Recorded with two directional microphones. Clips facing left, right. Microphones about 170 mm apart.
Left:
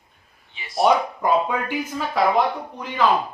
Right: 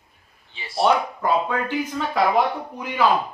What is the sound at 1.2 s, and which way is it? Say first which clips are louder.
Speech: left 1 dB; 15° left (ahead or behind).